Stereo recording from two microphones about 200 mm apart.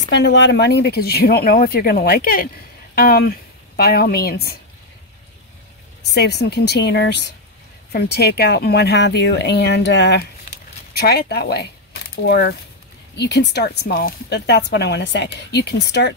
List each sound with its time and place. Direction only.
0.1 s speech: 60° left (ahead or behind)
6.0 s speech: 55° left (ahead or behind)